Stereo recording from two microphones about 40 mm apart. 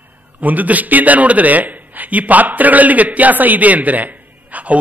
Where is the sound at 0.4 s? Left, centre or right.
Right.